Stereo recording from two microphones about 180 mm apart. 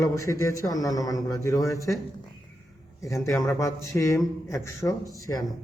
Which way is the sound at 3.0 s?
15° left (ahead or behind).